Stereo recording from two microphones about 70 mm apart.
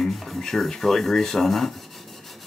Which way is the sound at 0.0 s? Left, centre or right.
Centre.